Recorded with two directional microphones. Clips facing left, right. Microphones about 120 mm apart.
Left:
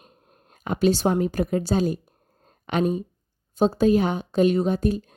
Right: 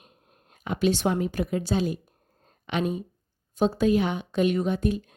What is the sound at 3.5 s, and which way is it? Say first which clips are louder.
Speech: left 3 dB; 35° left (ahead or behind).